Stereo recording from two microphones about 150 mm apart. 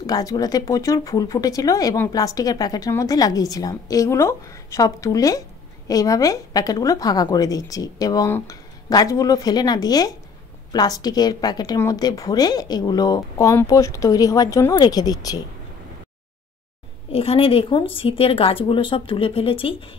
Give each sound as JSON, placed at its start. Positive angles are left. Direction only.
{"t": 0.0, "sound": "speech", "side_deg": 25}
{"t": 17.1, "sound": "a woman's voice", "side_deg": 40}